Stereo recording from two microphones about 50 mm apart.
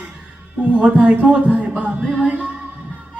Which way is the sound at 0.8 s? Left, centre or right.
Right.